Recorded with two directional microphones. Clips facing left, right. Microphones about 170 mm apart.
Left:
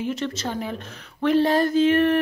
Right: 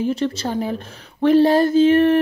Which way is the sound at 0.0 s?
30° right (ahead or behind).